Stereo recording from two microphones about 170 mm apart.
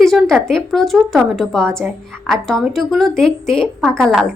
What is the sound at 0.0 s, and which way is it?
A woman's voice, centre (ahead or behind).